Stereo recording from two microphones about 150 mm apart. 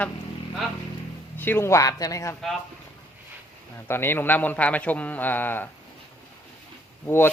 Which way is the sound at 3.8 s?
15° left (ahead or behind).